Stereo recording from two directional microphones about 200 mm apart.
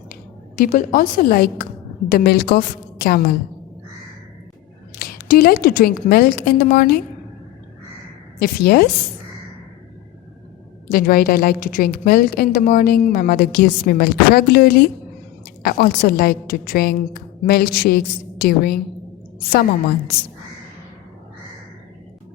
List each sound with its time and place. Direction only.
0.1 s a woman's voice: 45° left (ahead or behind)
4.9 s a woman's voice: 50° left (ahead or behind)
8.4 s a woman's voice: 50° left (ahead or behind)
10.9 s a woman's voice: 45° left (ahead or behind)